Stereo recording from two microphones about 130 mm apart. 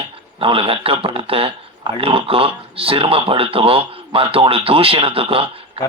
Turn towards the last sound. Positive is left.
turn(degrees=-45)  # may be behind; listen again after turning